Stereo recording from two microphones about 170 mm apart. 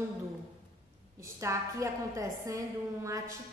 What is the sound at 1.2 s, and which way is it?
A woman's voice, 15° right (ahead or behind).